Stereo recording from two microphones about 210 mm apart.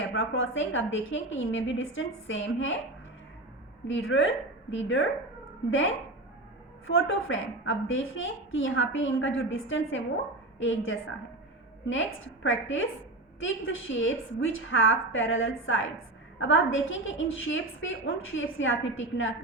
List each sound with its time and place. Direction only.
0.1 s a woman's voice: 70° left (ahead or behind)
3.8 s a woman's voice: 65° left (ahead or behind)
6.8 s a woman's voice: 65° left (ahead or behind)